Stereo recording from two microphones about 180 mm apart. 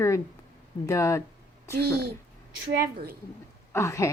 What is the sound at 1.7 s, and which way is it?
Speech, 60° right (ahead or behind).